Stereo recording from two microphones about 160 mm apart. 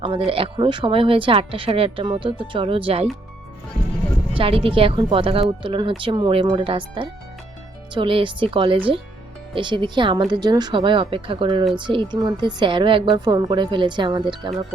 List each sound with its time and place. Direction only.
0.3 s a woman's voice: 35° right (ahead or behind)
4.4 s a woman's voice: 35° right (ahead or behind)